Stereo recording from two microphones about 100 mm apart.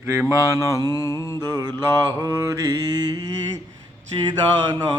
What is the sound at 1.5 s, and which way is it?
Music, 40° right (ahead or behind).